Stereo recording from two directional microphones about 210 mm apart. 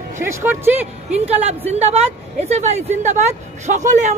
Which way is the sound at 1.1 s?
30° right (ahead or behind).